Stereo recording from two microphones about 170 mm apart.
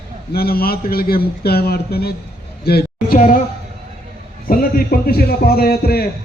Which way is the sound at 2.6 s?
65° left (ahead or behind).